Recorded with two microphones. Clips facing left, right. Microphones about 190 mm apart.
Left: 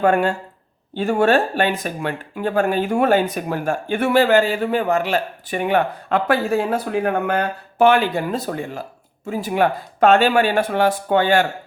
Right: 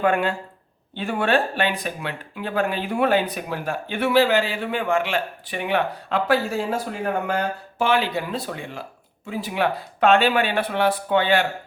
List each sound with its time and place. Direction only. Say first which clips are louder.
0.0 s speech: left 4 dB; 45° left (ahead or behind)